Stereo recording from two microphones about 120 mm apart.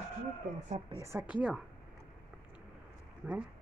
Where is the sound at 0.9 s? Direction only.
25° right (ahead or behind).